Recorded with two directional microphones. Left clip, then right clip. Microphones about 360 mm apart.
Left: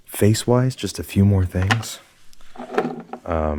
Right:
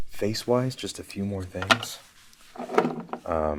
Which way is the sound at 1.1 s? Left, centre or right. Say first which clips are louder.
Left 14 dB; left.